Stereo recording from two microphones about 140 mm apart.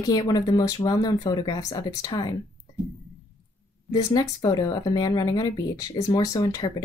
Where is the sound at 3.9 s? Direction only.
30° left (ahead or behind).